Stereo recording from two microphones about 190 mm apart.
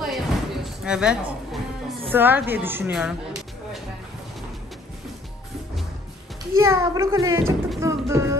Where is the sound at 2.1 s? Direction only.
10° right (ahead or behind).